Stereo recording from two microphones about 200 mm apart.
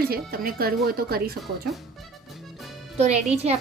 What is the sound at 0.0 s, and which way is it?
Speech, 50° right (ahead or behind).